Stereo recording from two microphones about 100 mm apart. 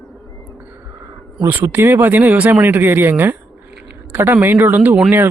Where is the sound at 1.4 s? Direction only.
20° right (ahead or behind).